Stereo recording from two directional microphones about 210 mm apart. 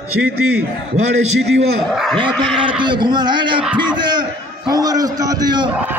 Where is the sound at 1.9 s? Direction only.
Centre (ahead or behind).